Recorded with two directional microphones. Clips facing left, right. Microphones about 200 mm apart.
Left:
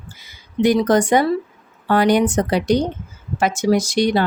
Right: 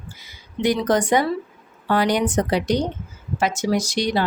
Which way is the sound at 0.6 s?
45° left (ahead or behind).